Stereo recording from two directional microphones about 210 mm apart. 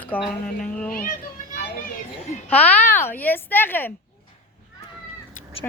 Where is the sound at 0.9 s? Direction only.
40° left (ahead or behind).